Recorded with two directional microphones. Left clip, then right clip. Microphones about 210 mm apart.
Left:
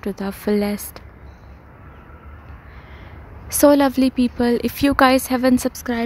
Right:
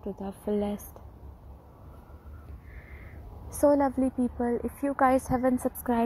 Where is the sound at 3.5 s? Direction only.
35° left (ahead or behind).